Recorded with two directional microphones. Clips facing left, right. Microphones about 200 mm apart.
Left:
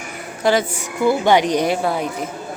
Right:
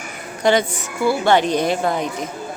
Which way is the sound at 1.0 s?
15° left (ahead or behind).